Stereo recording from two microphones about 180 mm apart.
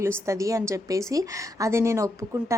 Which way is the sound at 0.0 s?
15° right (ahead or behind).